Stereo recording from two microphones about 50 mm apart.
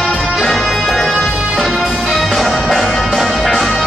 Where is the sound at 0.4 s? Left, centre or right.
Centre.